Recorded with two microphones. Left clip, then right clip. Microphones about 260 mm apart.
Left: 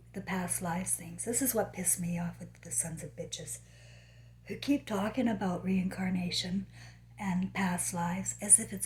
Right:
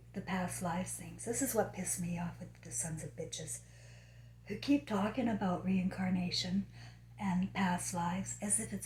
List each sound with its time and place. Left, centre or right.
0.1 s a woman's voice: left
4.4 s a woman's voice: left